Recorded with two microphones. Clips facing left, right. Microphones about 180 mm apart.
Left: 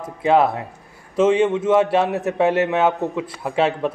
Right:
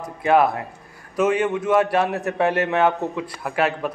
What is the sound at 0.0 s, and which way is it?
A man's voice, 25° left (ahead or behind).